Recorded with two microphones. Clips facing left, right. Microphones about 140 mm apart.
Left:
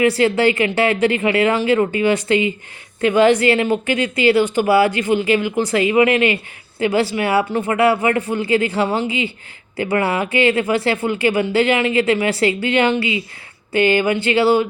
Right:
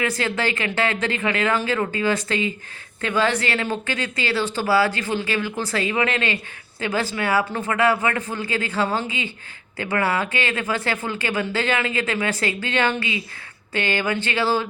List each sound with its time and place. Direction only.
0.0 s speech: 30° left (ahead or behind)